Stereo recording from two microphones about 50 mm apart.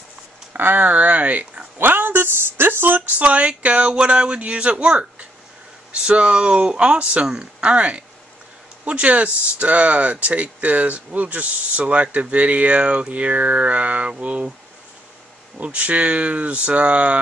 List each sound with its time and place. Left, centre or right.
0.5 s speech: right
1.8 s speech: right
3.2 s speech: right
15.6 s speech: right